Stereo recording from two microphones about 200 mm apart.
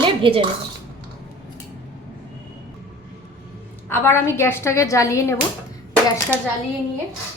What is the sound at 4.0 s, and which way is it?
A woman's voice, 15° left (ahead or behind).